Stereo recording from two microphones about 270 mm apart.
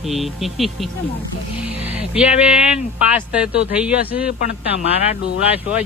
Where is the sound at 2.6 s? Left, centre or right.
Centre.